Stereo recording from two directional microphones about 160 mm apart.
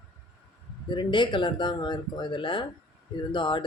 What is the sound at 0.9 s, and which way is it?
Speech, 30° left (ahead or behind).